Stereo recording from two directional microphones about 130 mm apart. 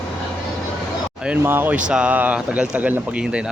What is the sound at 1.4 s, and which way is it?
Speech, 15° right (ahead or behind).